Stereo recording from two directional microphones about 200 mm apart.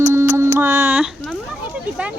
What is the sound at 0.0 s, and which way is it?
Music, 15° right (ahead or behind).